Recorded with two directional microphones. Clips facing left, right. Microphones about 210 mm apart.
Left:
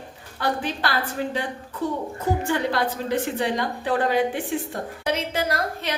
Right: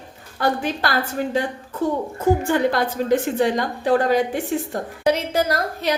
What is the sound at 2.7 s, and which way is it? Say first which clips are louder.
A woman's voice: right 5 dB; 45° right (ahead or behind).